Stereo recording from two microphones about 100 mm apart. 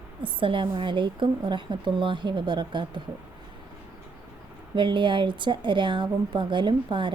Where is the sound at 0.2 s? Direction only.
60° right (ahead or behind).